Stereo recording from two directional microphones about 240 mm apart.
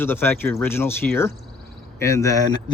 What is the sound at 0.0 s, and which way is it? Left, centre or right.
Speech, centre.